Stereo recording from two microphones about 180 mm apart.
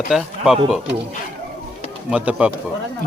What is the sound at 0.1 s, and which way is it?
Speech, centre (ahead or behind).